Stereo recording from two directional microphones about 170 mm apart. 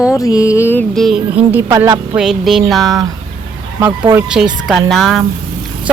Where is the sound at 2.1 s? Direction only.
5° right (ahead or behind).